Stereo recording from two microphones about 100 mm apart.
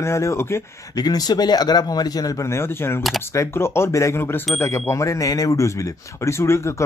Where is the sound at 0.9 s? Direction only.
40° left (ahead or behind).